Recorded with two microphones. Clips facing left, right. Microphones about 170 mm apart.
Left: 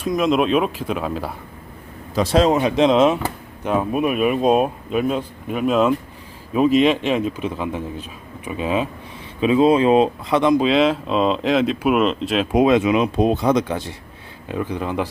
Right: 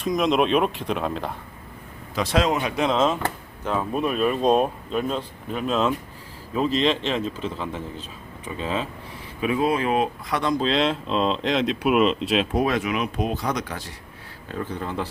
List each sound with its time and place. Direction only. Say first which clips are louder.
0.0 s speech: left 3 dB; centre (ahead or behind)
2.1 s speech: left 6 dB; 35° left (ahead or behind); by 8.9 s 15° left (ahead or behind)
9.4 s speech: left 8 dB; 25° left (ahead or behind)
10.6 s speech: left 6 dB; 5° left (ahead or behind)
12.5 s speech: left 8 dB; 20° left (ahead or behind)
14.4 s speech: left 5 dB; 15° left (ahead or behind)